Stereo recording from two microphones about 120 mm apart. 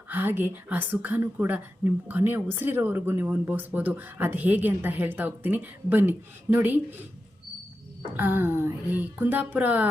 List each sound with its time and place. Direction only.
0.1 s speech: 15° right (ahead or behind)
8.1 s speech: 15° right (ahead or behind)